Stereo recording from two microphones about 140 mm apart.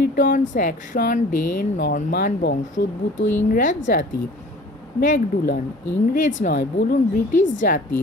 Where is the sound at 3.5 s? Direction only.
65° left (ahead or behind).